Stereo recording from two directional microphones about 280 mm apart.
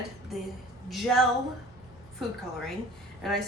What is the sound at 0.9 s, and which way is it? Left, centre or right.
Speech, centre.